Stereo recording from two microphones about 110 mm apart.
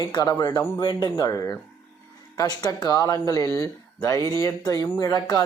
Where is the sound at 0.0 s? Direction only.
35° left (ahead or behind).